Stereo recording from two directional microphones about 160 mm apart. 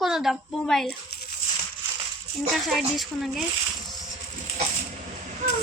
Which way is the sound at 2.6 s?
Centre (ahead or behind).